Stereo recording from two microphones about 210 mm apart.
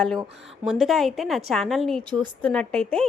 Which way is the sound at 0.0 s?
Centre (ahead or behind).